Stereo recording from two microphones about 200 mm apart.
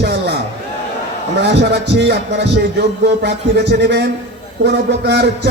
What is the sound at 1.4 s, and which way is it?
A man's voice, 60° right (ahead or behind).